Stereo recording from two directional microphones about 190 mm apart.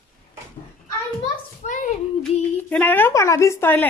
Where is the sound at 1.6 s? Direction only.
40° left (ahead or behind).